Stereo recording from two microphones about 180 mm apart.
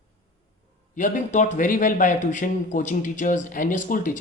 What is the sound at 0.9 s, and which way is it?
Speech, 45° left (ahead or behind).